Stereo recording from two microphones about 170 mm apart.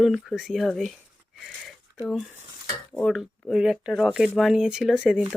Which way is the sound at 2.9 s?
Centre (ahead or behind).